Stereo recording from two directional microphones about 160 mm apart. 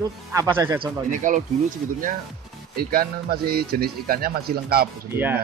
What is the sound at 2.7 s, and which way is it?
Speech, 70° right (ahead or behind).